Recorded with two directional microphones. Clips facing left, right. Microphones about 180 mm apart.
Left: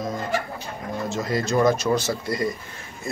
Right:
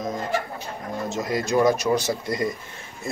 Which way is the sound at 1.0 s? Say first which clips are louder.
Left 1 dB; 20° right (ahead or behind).